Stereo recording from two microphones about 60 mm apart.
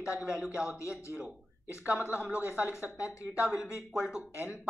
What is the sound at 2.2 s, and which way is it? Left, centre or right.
Speech, right.